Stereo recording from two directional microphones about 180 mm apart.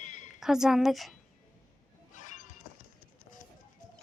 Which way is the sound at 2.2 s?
45° left (ahead or behind).